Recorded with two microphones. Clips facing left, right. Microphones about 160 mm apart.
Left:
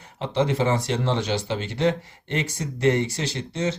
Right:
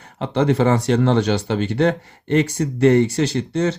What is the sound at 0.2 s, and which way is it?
Speech, 60° right (ahead or behind).